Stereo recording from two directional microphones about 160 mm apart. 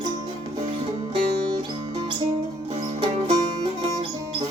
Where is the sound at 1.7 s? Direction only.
35° right (ahead or behind).